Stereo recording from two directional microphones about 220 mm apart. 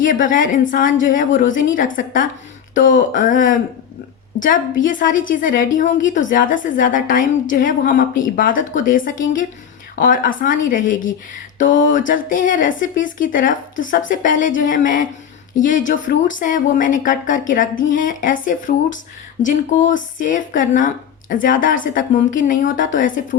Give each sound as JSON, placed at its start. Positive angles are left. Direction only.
{"t": 0.0, "sound": "a woman's voice", "side_deg": 35}